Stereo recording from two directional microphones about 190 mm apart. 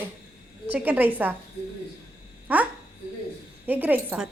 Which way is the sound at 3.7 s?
10° right (ahead or behind).